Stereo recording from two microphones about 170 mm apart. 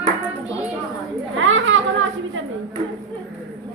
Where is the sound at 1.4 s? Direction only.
90° right.